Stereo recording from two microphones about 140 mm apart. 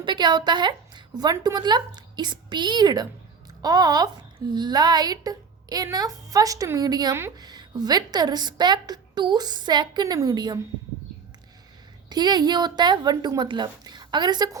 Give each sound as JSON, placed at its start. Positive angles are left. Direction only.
{"t": 0.0, "sound": "a woman's voice", "side_deg": -35}
{"t": 12.0, "sound": "a woman's voice", "side_deg": -30}